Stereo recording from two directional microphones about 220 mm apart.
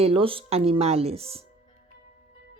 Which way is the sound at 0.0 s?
25° right (ahead or behind).